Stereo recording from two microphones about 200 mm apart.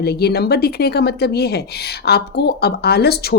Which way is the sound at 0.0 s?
55° left (ahead or behind).